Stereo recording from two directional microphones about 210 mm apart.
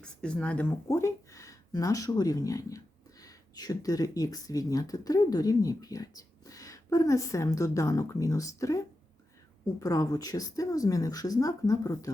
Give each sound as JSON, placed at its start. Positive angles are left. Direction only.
{"t": 0.0, "sound": "speech", "side_deg": 5}
{"t": 9.8, "sound": "speech", "side_deg": 15}